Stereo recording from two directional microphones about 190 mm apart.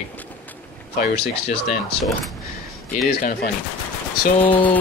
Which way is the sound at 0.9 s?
60° left (ahead or behind).